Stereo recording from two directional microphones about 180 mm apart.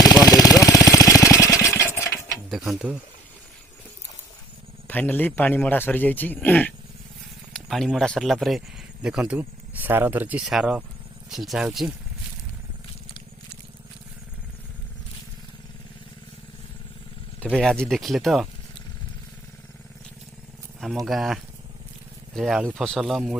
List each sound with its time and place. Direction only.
0.0 s a sound: 20° left (ahead or behind)
0.9 s jackhammer: 20° left (ahead or behind)
2.5 s mechanisms: centre (ahead or behind)
4.9 s a man's voice: 10° left (ahead or behind)
17.5 s speech: centre (ahead or behind)
20.8 s speech: centre (ahead or behind)